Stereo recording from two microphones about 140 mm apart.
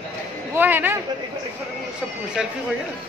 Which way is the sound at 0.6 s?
15° right (ahead or behind).